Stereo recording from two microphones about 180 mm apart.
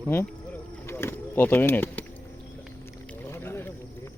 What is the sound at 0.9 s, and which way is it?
Speech, 10° left (ahead or behind).